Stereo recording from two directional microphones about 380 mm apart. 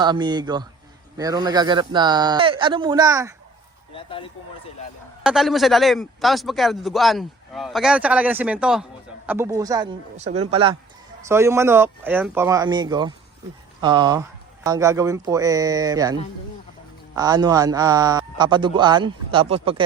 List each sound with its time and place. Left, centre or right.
0.0 s a man's voice: centre
3.9 s speech: centre
5.2 s a man's voice: centre
17.2 s a man's voice: centre